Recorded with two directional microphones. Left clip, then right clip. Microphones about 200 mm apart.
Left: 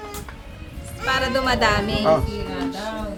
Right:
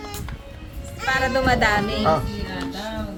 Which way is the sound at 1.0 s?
Centre (ahead or behind).